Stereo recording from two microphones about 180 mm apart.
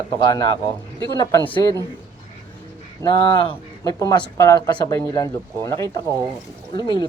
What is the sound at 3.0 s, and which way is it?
Speech, 25° left (ahead or behind).